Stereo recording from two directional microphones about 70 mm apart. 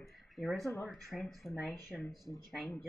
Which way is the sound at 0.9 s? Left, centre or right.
Centre.